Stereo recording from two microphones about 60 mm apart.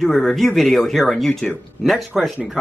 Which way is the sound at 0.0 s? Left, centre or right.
Centre.